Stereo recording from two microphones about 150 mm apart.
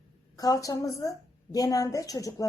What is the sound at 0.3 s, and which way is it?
Speech, 25° left (ahead or behind).